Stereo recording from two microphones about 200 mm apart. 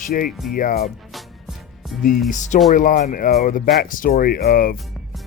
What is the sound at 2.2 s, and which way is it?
Speech, 40° left (ahead or behind).